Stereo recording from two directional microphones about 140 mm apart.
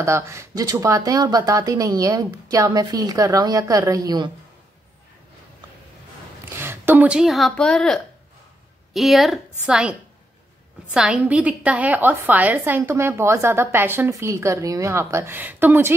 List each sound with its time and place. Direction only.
0.0 s speech: 20° right (ahead or behind)
6.5 s a woman's voice: 15° right (ahead or behind)